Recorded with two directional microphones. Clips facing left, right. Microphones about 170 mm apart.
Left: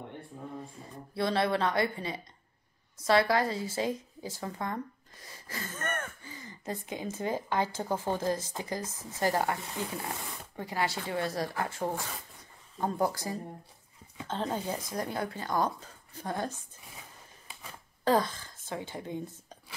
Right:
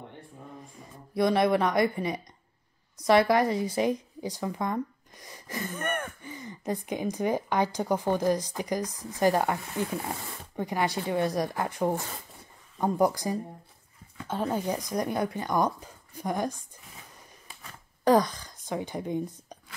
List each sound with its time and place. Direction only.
1.1 s a woman's voice: 15° right (ahead or behind)
18.0 s a woman's voice: 15° right (ahead or behind)